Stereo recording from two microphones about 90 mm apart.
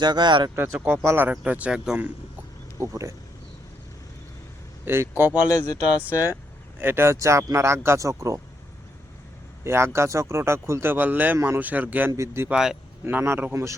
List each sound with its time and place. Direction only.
0.0 s speech: 55° right (ahead or behind)
0.5 s speech: 25° right (ahead or behind); by 2.0 s 10° right (ahead or behind)
2.7 s speech: 35° right (ahead or behind)
4.9 s speech: 25° right (ahead or behind)
5.5 s speech: 35° left (ahead or behind)
6.0 s speech: 20° right (ahead or behind); by 8.4 s 35° right (ahead or behind)
9.6 s speech: 30° right (ahead or behind)
12.1 s speech: 30° right (ahead or behind)
12.5 s speech: 5° right (ahead or behind)
13.1 s speech: 25° right (ahead or behind)